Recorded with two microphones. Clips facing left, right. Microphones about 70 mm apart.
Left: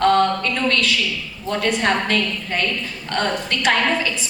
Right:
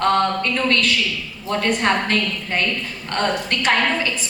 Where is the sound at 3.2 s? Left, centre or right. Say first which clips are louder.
Right 1 dB; right.